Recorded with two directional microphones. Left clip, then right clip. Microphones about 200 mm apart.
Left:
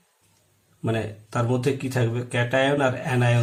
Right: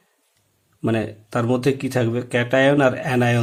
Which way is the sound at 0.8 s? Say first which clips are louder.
Right 5 dB; 45° right (ahead or behind).